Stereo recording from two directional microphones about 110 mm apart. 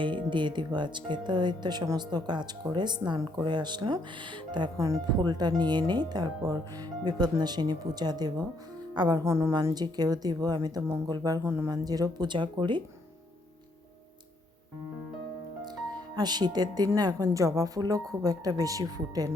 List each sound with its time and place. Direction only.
0.0 s speech: 45° right (ahead or behind)
4.8 s speech: 35° right (ahead or behind)
9.2 s a woman's voice: 25° right (ahead or behind)
9.7 s speech: 40° right (ahead or behind); by 11.7 s 20° right (ahead or behind)
11.7 s speech: 35° right (ahead or behind)
16.1 s speech: 40° right (ahead or behind)